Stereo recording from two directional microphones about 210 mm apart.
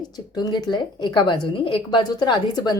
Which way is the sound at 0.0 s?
20° left (ahead or behind).